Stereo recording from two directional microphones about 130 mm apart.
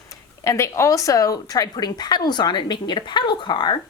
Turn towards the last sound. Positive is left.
turn(degrees=35)  # may be behind; listen again after turning